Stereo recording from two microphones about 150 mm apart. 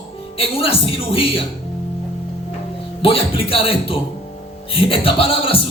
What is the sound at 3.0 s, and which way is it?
Speech, 40° left (ahead or behind).